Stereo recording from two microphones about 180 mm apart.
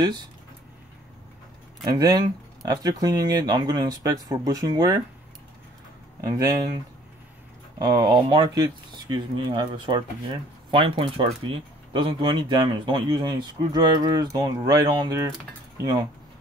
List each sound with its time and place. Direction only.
0.0 s speech: 25° right (ahead or behind)
1.9 s speech: 20° right (ahead or behind)
6.2 s speech: 20° right (ahead or behind)
7.8 s speech: 20° right (ahead or behind)